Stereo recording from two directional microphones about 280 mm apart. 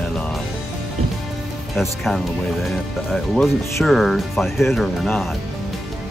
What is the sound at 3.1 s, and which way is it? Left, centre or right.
Speech, centre.